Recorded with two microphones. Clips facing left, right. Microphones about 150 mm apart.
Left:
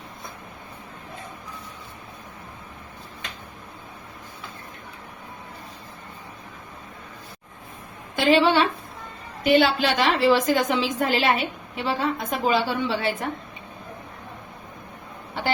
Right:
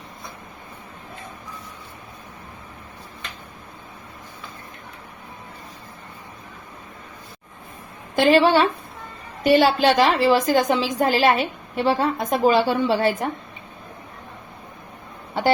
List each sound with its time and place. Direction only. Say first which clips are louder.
8.1 s a woman's voice: right 3 dB; 45° right (ahead or behind)